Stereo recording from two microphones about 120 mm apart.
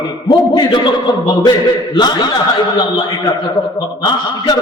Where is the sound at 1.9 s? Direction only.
35° left (ahead or behind).